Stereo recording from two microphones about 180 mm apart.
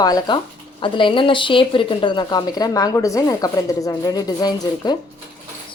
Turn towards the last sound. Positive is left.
turn(degrees=20)  # may be behind; listen again after turning